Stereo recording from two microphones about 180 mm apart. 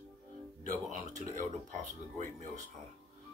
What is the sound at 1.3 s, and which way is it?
Speech, 45° right (ahead or behind).